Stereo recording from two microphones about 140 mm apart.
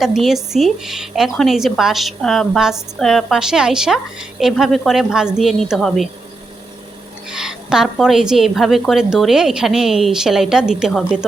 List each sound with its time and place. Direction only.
0.0 s speech: centre (ahead or behind)
7.3 s speech: 5° right (ahead or behind)